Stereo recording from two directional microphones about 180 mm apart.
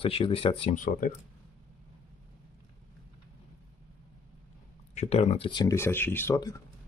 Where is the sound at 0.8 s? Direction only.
50° left (ahead or behind).